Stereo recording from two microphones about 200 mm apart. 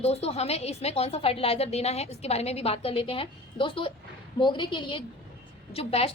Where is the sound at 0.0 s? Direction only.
30° left (ahead or behind).